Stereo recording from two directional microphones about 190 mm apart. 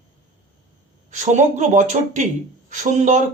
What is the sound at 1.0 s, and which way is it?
Speech, 40° right (ahead or behind).